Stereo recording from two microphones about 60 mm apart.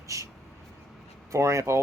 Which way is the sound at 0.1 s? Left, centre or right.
Right.